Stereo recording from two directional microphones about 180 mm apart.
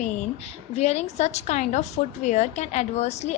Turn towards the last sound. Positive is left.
turn(degrees=40)  # may be behind; listen again after turning